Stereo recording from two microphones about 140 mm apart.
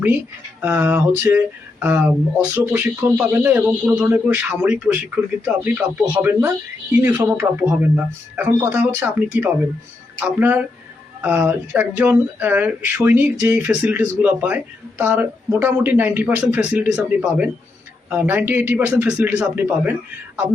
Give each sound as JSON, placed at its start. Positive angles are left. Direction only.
{"t": 0.6, "sound": "speech", "side_deg": -15}
{"t": 6.1, "sound": "speech", "side_deg": -15}